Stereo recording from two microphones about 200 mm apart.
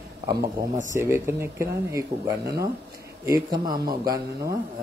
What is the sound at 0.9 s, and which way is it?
Speech, 15° right (ahead or behind).